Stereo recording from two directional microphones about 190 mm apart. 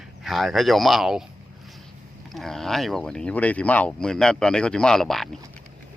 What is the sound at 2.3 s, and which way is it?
Speech, centre (ahead or behind).